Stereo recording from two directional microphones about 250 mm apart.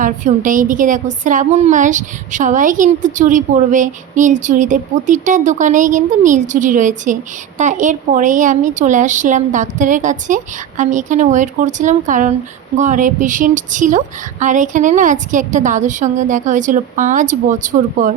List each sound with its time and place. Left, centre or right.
0.0 s a woman's voice: right